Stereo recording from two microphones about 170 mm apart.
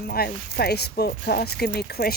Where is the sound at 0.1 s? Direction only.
65° left (ahead or behind).